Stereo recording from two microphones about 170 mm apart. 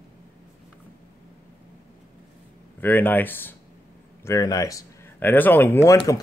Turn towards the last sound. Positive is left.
turn(degrees=15)  # may be behind; listen again after turning